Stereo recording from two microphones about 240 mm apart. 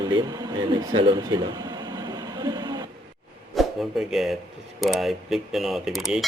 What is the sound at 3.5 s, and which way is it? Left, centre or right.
Speech, centre.